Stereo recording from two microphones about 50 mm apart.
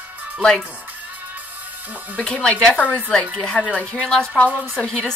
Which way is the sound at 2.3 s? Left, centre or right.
Centre.